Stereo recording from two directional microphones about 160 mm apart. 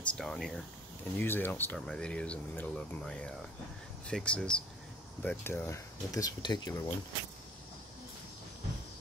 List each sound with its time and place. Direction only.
0.1 s speech: 5° left (ahead or behind); by 6.9 s 25° left (ahead or behind)